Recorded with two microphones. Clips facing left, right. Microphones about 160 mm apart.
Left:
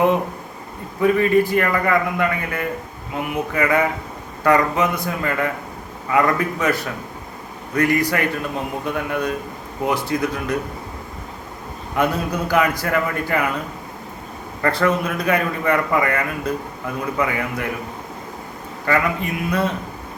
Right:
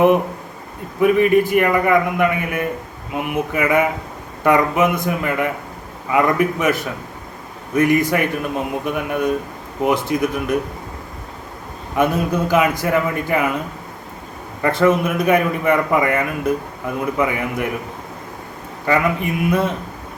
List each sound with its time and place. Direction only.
1.0 s a man's voice: 20° right (ahead or behind)
11.9 s a man's voice: 20° right (ahead or behind)
14.6 s a man's voice: 20° right (ahead or behind)
18.9 s a man's voice: 20° right (ahead or behind)